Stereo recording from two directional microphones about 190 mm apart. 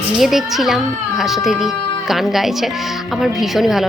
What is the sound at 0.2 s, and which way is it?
A woman's voice, centre (ahead or behind).